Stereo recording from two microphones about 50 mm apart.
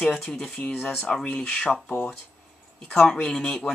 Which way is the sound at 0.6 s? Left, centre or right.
Left.